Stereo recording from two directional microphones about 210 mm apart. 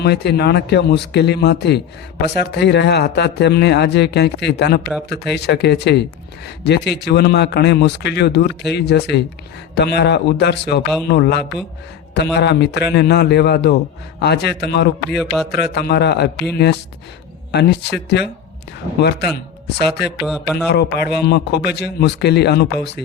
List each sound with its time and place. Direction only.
0.0 s a man's voice: 55° left (ahead or behind)
15.1 s a man's voice: centre (ahead or behind)
15.5 s a man's voice: 50° left (ahead or behind)
19.6 s a man's voice: 50° left (ahead or behind)
20.2 s a man's voice: 5° right (ahead or behind)
20.7 s a man's voice: 50° left (ahead or behind)